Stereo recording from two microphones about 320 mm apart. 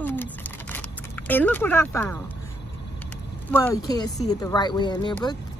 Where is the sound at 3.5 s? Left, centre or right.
Centre.